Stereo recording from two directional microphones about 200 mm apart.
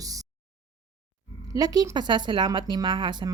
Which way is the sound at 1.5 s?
20° right (ahead or behind).